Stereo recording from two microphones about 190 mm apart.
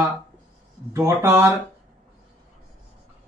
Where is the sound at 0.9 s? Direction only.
15° right (ahead or behind).